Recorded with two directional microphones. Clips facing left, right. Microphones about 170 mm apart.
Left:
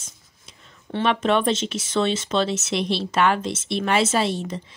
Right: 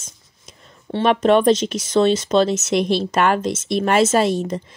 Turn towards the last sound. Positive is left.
turn(degrees=-45)  # may be behind; listen again after turning